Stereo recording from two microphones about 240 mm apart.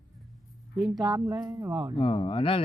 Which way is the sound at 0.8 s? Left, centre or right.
Centre.